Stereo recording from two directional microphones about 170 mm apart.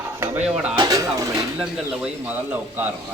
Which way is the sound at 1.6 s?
5° right (ahead or behind).